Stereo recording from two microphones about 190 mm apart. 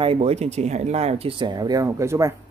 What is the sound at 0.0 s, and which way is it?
Speech, 30° right (ahead or behind).